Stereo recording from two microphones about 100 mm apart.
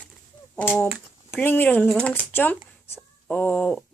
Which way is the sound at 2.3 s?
20° left (ahead or behind).